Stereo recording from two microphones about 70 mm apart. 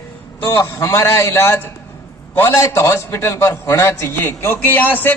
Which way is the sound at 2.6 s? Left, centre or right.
Left.